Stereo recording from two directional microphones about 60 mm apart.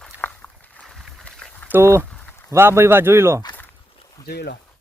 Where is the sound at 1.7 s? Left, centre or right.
Right.